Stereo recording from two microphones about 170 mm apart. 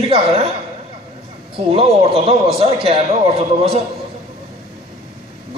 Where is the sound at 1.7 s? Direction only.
35° right (ahead or behind).